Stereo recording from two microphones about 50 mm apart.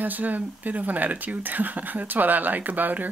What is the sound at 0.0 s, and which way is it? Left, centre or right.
Speech, right.